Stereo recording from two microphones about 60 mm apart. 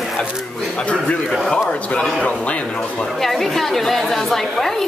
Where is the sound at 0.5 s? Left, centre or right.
Centre.